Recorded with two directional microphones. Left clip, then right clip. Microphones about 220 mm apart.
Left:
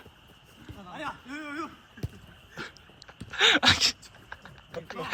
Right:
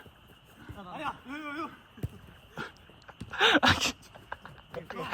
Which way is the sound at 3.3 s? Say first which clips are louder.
Left 2 dB; 5° right (ahead or behind).